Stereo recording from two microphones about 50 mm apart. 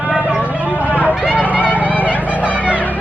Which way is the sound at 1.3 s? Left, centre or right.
Left.